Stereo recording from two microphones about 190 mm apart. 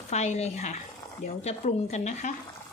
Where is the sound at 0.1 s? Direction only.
35° left (ahead or behind).